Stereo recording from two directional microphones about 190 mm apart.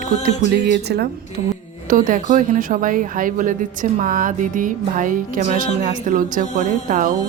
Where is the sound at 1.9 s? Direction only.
45° right (ahead or behind).